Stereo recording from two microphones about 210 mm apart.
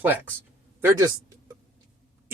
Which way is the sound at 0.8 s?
15° right (ahead or behind).